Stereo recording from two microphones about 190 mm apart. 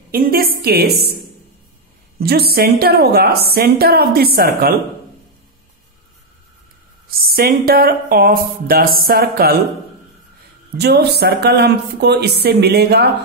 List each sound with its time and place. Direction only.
0.1 s a woman's voice: 50° right (ahead or behind)
2.1 s a woman's voice: 55° right (ahead or behind)
7.1 s speech: 50° right (ahead or behind)
10.8 s a woman's voice: 60° right (ahead or behind)